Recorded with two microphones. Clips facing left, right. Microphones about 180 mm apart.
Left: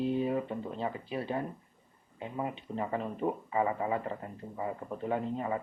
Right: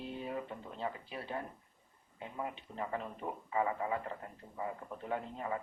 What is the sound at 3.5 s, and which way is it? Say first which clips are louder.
A man's voice: left 1 dB; 15° left (ahead or behind).